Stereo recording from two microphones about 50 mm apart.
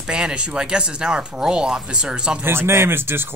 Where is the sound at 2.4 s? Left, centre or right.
Right.